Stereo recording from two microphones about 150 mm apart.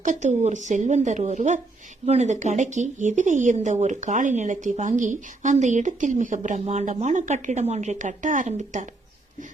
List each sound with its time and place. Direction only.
0.0 s speech: 55° right (ahead or behind)